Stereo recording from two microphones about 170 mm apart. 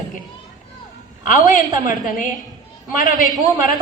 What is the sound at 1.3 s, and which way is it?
Speech, 50° left (ahead or behind).